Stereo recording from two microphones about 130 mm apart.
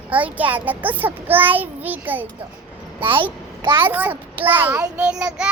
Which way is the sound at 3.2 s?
40° right (ahead or behind).